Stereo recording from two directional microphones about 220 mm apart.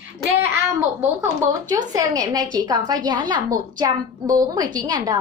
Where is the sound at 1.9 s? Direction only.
15° right (ahead or behind).